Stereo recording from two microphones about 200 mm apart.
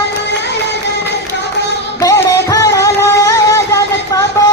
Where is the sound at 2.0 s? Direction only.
15° left (ahead or behind).